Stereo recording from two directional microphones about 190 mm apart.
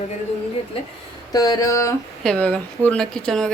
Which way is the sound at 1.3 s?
20° left (ahead or behind).